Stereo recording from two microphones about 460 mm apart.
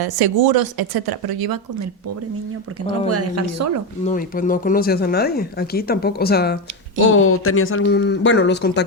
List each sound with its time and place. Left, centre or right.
0.0 s a woman's voice: right
3.1 s speech: right
4.0 s speech: centre